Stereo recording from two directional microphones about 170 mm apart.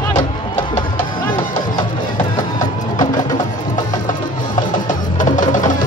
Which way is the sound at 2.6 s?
25° left (ahead or behind).